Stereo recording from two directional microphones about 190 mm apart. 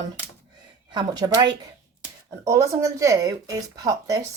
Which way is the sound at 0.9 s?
20° right (ahead or behind).